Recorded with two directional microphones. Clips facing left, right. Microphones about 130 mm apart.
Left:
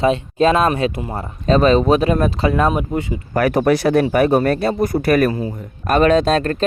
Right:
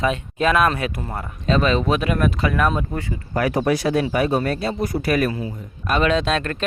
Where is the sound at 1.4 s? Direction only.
40° left (ahead or behind).